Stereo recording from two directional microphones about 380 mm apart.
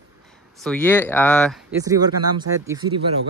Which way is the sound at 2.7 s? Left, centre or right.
Centre.